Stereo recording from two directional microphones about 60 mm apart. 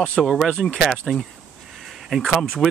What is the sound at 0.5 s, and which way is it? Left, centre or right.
Speech, centre.